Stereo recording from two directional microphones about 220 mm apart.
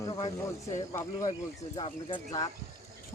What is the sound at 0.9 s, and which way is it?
Speech, 15° left (ahead or behind).